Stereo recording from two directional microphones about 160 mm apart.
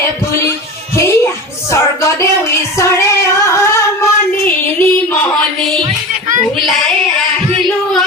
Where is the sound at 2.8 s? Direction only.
15° left (ahead or behind).